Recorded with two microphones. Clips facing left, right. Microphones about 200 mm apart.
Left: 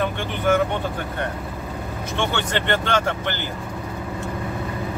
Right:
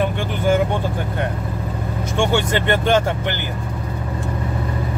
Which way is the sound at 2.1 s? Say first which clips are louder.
Right 5 dB; 10° right (ahead or behind).